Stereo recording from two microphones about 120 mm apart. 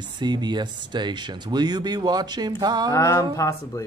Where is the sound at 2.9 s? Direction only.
25° left (ahead or behind).